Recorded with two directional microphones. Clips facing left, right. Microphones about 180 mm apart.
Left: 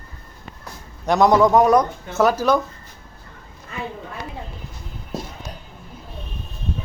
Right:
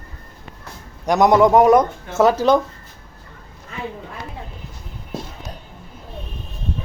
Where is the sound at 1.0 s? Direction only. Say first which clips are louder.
Right 1 dB; 15° right (ahead or behind).